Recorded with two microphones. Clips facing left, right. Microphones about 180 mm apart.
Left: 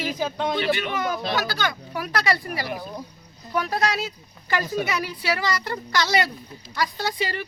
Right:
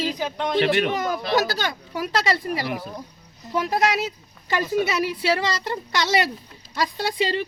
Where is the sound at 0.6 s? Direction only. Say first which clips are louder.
Right 8 dB; 70° right (ahead or behind).